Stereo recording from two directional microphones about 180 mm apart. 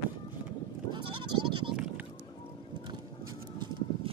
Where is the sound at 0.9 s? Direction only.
25° right (ahead or behind).